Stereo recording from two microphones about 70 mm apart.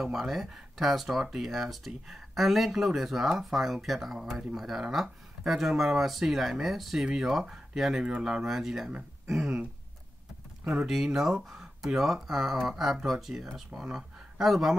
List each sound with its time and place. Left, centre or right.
0.0 s speech: centre
9.3 s a sound: centre
10.6 s speech: centre